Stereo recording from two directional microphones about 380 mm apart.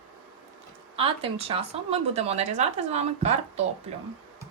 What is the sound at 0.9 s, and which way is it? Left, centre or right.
Speech, centre.